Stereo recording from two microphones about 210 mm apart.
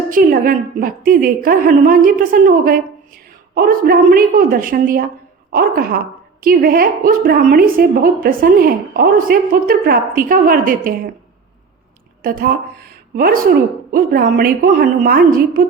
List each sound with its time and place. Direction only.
0.1 s a woman's voice: 40° right (ahead or behind)
12.2 s a woman's voice: 45° right (ahead or behind)